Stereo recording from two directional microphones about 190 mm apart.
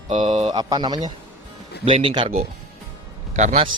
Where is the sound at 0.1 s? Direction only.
25° right (ahead or behind).